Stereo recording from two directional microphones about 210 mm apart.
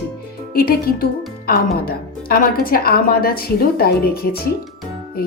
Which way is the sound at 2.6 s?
45° left (ahead or behind).